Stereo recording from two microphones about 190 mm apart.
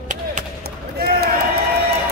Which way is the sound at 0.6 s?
55° right (ahead or behind).